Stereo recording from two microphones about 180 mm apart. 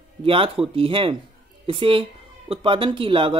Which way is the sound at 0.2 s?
30° right (ahead or behind).